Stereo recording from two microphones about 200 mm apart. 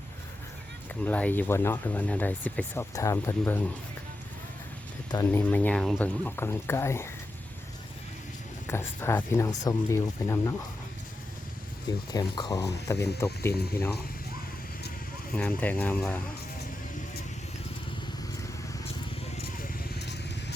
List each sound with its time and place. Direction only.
1.0 s speech: 10° left (ahead or behind)
5.1 s speech: 10° left (ahead or behind)
8.6 s speech: 10° left (ahead or behind)
11.9 s speech: 20° left (ahead or behind)
15.3 s speech: 5° left (ahead or behind)